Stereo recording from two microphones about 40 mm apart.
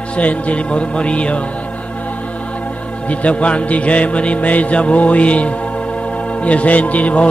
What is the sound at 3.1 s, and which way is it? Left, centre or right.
Speech, left.